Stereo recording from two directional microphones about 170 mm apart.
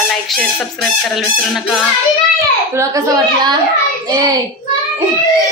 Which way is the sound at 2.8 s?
20° right (ahead or behind).